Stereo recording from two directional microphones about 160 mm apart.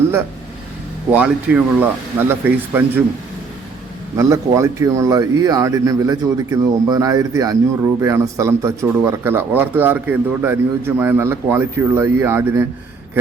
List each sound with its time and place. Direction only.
1.1 s a man's voice: 10° right (ahead or behind)
4.2 s a man's voice: 20° right (ahead or behind)